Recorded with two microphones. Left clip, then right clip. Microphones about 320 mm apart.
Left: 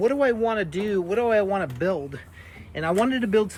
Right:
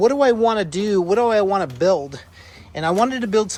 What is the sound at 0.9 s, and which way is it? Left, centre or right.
Speech, right.